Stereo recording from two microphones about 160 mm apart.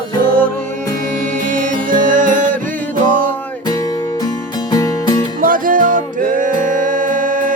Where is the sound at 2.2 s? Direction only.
55° right (ahead or behind).